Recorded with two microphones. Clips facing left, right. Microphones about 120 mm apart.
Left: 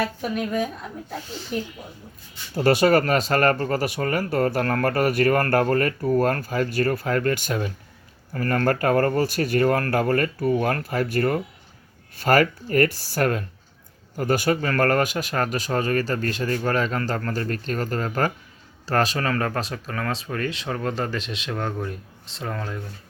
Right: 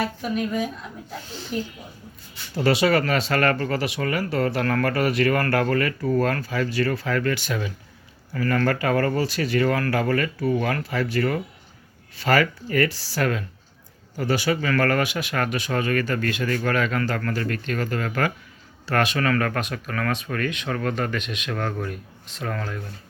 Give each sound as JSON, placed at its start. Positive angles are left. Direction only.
{"t": 0.2, "sound": "speech", "side_deg": 50}
{"t": 2.6, "sound": "speech", "side_deg": 45}
{"t": 20.7, "sound": "speech", "side_deg": 20}
{"t": 20.9, "sound": "speech", "side_deg": 30}
{"t": 21.5, "sound": "speech", "side_deg": 15}